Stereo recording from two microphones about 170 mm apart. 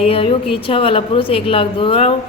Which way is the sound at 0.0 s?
35° left (ahead or behind).